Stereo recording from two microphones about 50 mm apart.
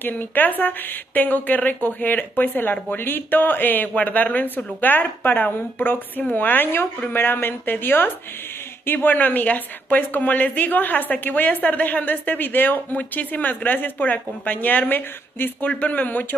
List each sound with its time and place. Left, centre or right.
0.0 s a woman's voice: left